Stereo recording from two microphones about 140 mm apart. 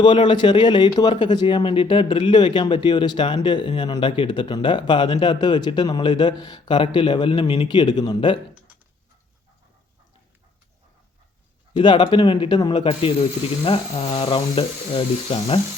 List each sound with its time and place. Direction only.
0.0 s speech: 35° left (ahead or behind)
11.7 s speech: 35° left (ahead or behind)